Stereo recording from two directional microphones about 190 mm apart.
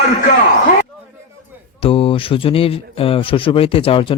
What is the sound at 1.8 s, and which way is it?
A man's voice, 30° left (ahead or behind).